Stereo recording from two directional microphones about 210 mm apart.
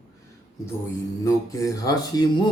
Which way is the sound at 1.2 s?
15° left (ahead or behind).